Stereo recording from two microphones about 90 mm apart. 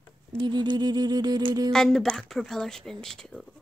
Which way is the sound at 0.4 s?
55° right (ahead or behind).